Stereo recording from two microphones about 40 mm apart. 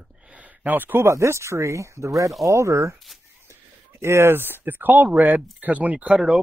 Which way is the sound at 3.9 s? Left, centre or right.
Right.